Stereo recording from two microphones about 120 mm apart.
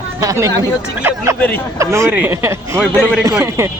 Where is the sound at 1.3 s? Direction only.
15° left (ahead or behind).